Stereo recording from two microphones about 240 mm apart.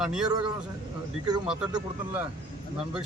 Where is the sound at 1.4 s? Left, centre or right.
Centre.